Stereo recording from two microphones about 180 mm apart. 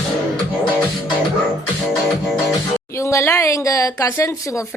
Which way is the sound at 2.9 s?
15° left (ahead or behind).